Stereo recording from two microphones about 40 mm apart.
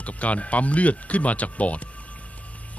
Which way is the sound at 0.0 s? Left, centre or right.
Left.